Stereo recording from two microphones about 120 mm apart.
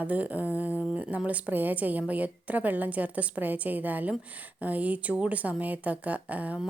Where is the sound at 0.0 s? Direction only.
10° right (ahead or behind).